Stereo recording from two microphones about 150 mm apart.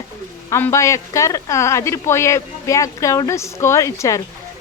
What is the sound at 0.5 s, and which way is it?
Speech, 20° left (ahead or behind).